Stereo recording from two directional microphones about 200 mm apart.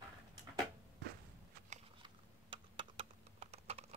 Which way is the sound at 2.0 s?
25° right (ahead or behind).